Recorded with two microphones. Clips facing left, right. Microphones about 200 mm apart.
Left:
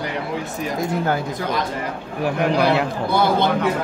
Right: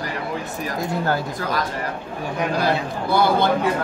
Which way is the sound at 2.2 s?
70° left (ahead or behind).